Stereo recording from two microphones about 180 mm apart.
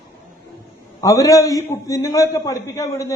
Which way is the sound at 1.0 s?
20° left (ahead or behind).